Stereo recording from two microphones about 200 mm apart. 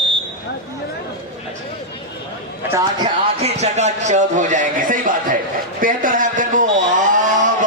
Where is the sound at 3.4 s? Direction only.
35° right (ahead or behind).